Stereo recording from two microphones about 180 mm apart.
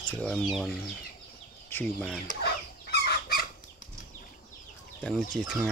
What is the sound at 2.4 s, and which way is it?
Chicken, 65° left (ahead or behind).